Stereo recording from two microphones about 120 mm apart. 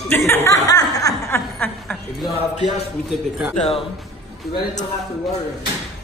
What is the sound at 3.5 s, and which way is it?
Speech, 70° left (ahead or behind).